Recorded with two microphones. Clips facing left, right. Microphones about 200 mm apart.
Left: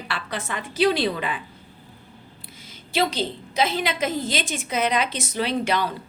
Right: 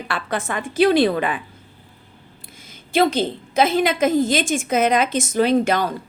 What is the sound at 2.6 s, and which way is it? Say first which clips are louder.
A woman's voice: right 6 dB; 50° right (ahead or behind).